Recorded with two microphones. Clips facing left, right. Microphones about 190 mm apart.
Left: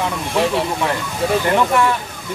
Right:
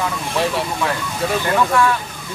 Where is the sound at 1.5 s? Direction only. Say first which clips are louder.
Right 2 dB; 20° left (ahead or behind).